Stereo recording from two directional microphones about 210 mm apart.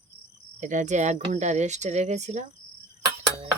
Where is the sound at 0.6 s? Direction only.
35° right (ahead or behind).